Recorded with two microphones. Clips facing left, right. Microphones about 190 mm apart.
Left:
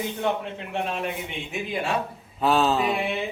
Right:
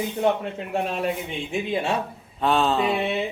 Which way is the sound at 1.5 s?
25° right (ahead or behind).